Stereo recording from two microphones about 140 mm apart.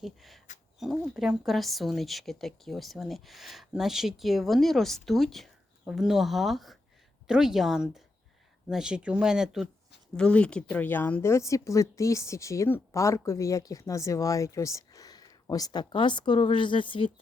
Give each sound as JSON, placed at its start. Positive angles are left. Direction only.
{"t": 0.0, "sound": "speech", "side_deg": 0}
{"t": 10.2, "sound": "a woman's voice", "side_deg": 5}